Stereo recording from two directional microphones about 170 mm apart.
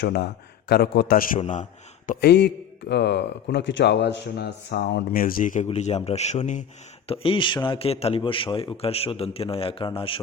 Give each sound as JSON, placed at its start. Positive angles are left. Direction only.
{"t": 0.0, "sound": "a man's voice", "side_deg": 75}
{"t": 1.4, "sound": "a man's voice", "side_deg": 45}
{"t": 2.2, "sound": "a man's voice", "side_deg": 70}
{"t": 5.6, "sound": "a man's voice", "side_deg": 40}
{"t": 7.1, "sound": "a man's voice", "side_deg": 30}